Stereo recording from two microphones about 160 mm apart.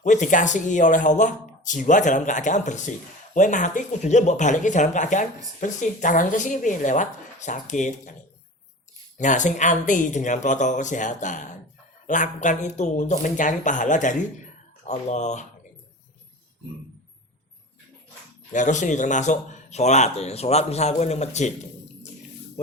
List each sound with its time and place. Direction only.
0.0 s speech: 50° left (ahead or behind)
9.1 s speech: 50° left (ahead or behind)
18.5 s speech: 50° left (ahead or behind)